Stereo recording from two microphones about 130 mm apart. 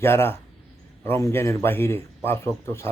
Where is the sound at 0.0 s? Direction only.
20° left (ahead or behind).